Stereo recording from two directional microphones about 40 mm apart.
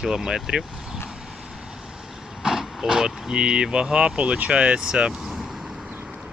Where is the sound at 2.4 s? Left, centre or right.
Centre.